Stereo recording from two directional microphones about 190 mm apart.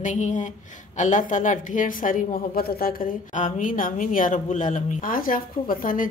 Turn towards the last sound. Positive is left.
turn(degrees=45)  # may be behind; listen again after turning